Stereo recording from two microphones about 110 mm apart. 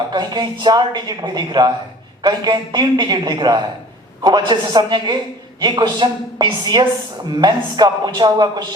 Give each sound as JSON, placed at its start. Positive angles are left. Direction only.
{"t": 0.1, "sound": "a man's voice", "side_deg": -40}